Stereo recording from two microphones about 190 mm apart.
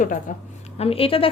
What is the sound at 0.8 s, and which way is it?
Speech, 30° left (ahead or behind).